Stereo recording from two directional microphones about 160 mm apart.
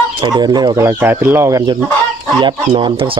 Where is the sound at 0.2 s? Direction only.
25° right (ahead or behind).